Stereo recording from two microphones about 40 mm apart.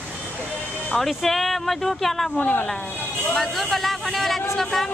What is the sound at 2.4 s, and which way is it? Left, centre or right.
Speech, left.